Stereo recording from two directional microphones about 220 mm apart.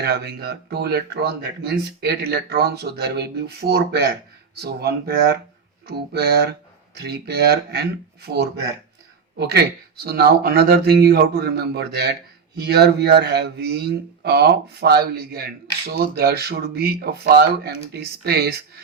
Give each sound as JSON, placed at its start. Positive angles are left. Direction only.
{"t": 0.0, "sound": "speech", "side_deg": -45}